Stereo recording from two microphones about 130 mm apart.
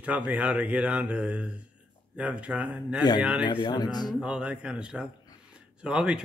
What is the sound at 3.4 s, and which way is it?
Speech, 35° left (ahead or behind).